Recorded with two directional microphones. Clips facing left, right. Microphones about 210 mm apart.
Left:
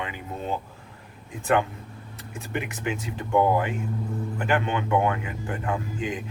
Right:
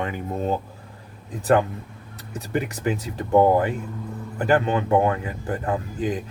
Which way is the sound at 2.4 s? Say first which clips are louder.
Right 5 dB; 35° right (ahead or behind).